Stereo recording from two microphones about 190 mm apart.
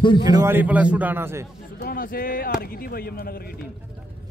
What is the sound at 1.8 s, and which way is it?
Speech, 50° left (ahead or behind).